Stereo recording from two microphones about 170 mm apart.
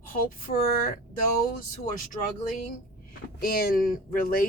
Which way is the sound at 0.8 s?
55° left (ahead or behind).